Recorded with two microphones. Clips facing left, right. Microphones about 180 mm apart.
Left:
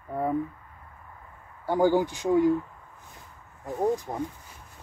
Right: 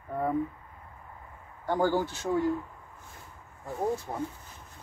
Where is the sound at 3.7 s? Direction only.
15° left (ahead or behind).